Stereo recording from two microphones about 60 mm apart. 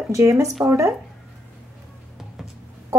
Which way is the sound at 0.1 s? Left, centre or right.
Right.